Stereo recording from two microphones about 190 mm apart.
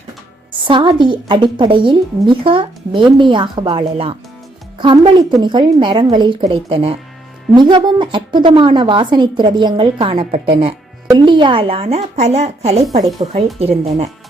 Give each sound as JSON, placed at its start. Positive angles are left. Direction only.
{"t": 0.6, "sound": "a woman's voice", "side_deg": -25}
{"t": 13.2, "sound": "a woman's voice", "side_deg": -25}